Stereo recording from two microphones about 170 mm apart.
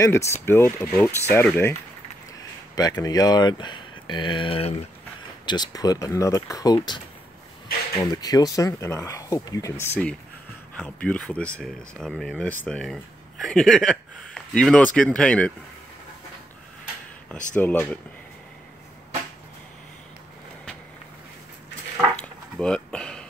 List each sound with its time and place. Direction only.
0.0 s speech: 15° left (ahead or behind)
8.0 s speech: 25° left (ahead or behind); by 15.5 s 5° left (ahead or behind)
17.6 s speech: 10° left (ahead or behind)
22.1 s a sound: 5° left (ahead or behind)